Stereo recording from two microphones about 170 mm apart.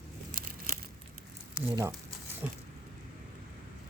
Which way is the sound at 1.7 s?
20° right (ahead or behind).